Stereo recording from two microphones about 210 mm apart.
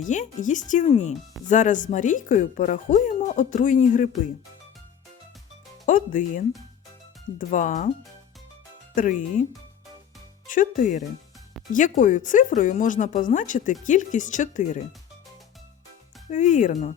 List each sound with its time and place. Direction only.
0.0 s speech: 35° left (ahead or behind)
5.8 s speech: 40° left (ahead or behind)
9.0 s speech: 40° left (ahead or behind)
10.5 s speech: 40° left (ahead or behind)
16.3 s speech: 35° left (ahead or behind)